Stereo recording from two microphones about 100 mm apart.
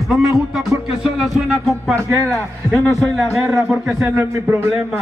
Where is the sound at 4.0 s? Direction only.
25° right (ahead or behind).